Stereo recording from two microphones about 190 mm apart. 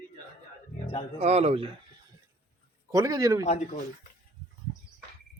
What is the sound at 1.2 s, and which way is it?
Speech, 35° right (ahead or behind).